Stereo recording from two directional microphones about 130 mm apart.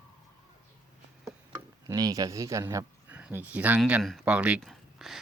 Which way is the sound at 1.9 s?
30° right (ahead or behind).